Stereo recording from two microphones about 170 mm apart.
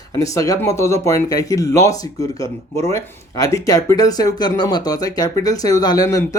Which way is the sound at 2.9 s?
20° left (ahead or behind).